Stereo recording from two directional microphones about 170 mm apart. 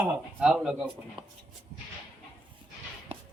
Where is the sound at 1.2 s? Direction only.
25° right (ahead or behind).